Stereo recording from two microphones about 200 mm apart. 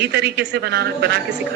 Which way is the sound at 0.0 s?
55° right (ahead or behind).